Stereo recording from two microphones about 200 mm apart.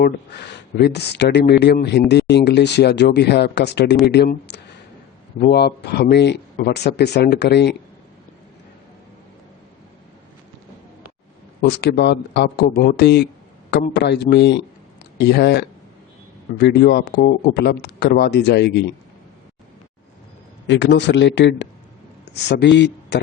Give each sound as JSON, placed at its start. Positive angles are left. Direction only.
{"t": 0.0, "sound": "speech", "side_deg": 55}
{"t": 11.6, "sound": "speech", "side_deg": 55}
{"t": 20.7, "sound": "a man's voice", "side_deg": 65}